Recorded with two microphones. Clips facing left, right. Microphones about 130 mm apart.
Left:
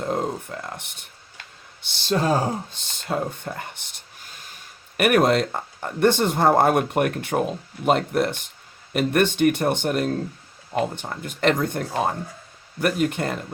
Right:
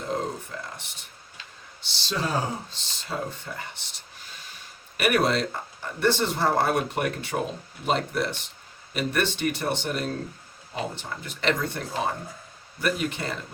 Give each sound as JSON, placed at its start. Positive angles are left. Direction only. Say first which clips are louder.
{"t": 0.6, "sound": "speech", "louder": "left 4 dB", "side_deg": 55}